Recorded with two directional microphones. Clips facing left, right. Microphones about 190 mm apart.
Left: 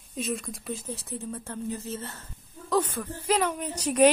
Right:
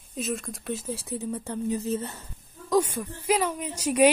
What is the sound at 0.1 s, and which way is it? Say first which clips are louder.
Speech: right 1 dB; centre (ahead or behind).